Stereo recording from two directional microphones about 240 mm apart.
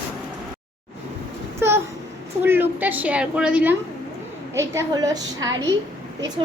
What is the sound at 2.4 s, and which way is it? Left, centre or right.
A woman's voice, centre.